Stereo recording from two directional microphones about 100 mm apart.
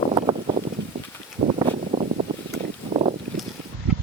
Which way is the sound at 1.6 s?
75° right (ahead or behind).